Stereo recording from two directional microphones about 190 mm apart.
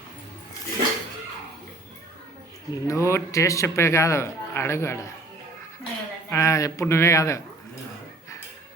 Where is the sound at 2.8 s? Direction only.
15° left (ahead or behind).